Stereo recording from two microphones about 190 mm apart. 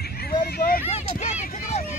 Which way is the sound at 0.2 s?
50° left (ahead or behind).